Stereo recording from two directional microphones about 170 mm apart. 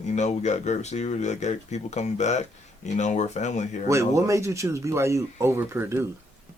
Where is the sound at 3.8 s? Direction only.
20° right (ahead or behind).